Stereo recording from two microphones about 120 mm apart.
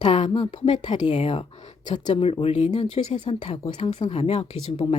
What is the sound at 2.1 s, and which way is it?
Speech, 50° left (ahead or behind).